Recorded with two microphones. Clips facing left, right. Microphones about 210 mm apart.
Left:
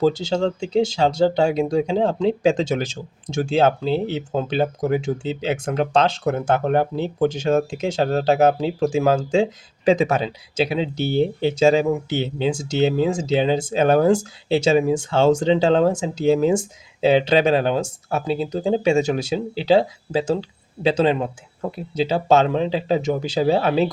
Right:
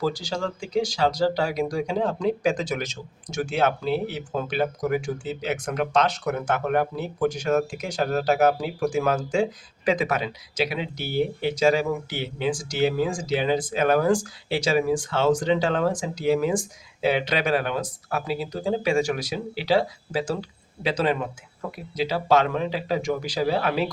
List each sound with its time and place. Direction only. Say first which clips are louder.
0.0 s speech: left 8 dB; 25° left (ahead or behind)